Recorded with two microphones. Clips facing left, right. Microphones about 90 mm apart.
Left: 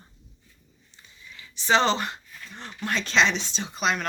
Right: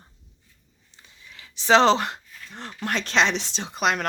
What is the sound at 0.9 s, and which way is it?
Speech, 75° right (ahead or behind).